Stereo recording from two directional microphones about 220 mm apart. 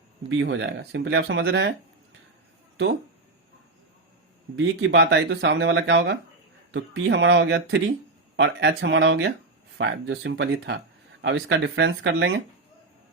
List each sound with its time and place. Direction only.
0.3 s speech: 55° right (ahead or behind)
4.5 s speech: 55° right (ahead or behind)